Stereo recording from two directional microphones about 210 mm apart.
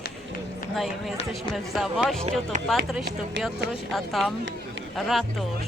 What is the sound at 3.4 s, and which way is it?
Speech, 55° right (ahead or behind).